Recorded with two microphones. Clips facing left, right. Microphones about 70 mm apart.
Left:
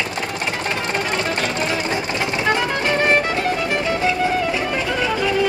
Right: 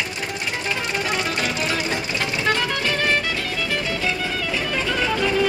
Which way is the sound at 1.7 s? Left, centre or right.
Centre.